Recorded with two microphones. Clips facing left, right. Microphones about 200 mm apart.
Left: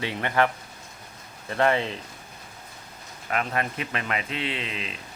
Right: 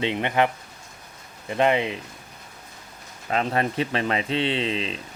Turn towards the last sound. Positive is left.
turn(degrees=-30)  # may be behind; listen again after turning